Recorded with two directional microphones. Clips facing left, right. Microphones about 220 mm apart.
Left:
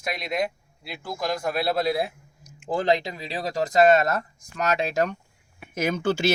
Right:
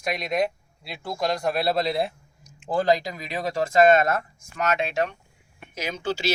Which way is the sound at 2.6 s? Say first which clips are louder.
Right 1 dB; 25° left (ahead or behind).